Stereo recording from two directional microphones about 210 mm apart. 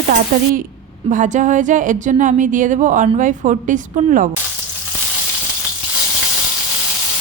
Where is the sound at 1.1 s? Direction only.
35° right (ahead or behind).